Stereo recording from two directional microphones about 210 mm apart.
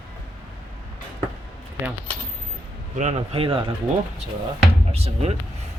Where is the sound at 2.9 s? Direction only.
35° right (ahead or behind).